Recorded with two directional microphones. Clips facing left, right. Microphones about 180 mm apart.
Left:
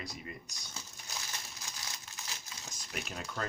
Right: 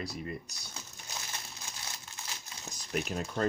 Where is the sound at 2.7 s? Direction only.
35° right (ahead or behind).